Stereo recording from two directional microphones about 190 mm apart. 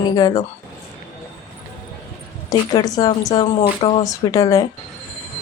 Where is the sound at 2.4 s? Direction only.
20° left (ahead or behind).